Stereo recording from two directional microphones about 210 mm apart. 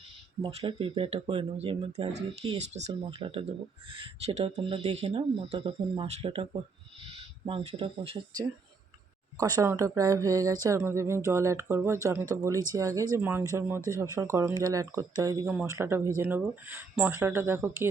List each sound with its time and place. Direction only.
0.4 s speech: 25° right (ahead or behind); by 17.8 s 10° right (ahead or behind)